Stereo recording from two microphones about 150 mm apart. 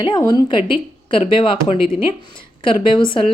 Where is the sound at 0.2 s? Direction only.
25° left (ahead or behind).